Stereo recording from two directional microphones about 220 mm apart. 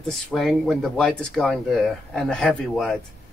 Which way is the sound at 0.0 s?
Centre (ahead or behind).